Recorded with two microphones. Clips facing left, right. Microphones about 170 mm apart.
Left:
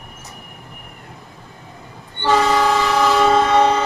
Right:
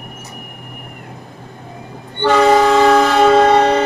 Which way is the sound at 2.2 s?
65° right (ahead or behind).